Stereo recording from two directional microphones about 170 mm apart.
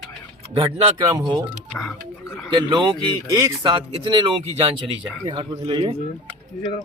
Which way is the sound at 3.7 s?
30° right (ahead or behind).